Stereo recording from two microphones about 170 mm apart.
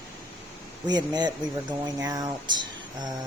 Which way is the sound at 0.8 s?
25° right (ahead or behind).